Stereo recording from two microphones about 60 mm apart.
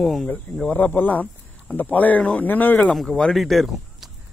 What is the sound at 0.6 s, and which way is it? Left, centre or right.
Speech, left.